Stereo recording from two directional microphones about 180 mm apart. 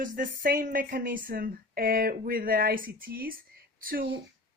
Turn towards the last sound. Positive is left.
turn(degrees=-50)  # may be behind; listen again after turning